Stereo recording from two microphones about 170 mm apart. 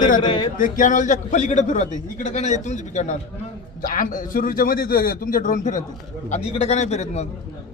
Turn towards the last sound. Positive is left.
turn(degrees=40)  # may be behind; listen again after turning